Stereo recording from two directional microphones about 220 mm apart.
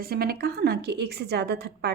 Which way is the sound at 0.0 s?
45° right (ahead or behind).